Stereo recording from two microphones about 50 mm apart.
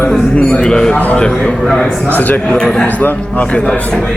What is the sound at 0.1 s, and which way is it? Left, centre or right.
A man's voice, centre.